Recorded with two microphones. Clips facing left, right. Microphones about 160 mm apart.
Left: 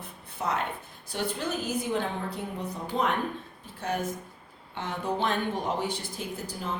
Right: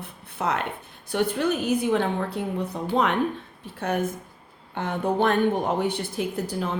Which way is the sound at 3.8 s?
60° right (ahead or behind).